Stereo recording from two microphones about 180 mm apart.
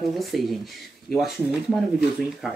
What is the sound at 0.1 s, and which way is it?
Speech, centre (ahead or behind).